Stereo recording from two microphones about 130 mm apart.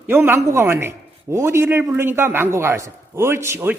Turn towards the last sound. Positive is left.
turn(degrees=-20)  # may be behind; listen again after turning